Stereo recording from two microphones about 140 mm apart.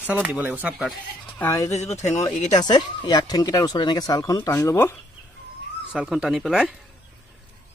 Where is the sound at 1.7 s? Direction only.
50° left (ahead or behind).